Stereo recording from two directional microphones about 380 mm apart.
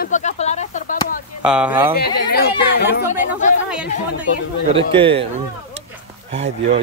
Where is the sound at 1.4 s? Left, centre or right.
Centre.